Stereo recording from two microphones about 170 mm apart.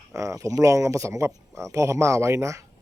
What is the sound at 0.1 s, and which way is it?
Speech, 20° right (ahead or behind).